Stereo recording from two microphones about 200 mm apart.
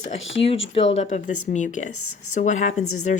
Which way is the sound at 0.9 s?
35° left (ahead or behind).